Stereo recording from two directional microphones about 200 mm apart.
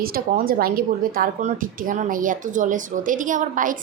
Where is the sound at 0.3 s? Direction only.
45° right (ahead or behind).